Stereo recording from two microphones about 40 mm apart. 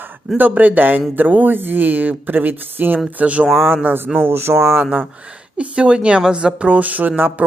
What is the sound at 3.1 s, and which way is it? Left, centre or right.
Speech, right.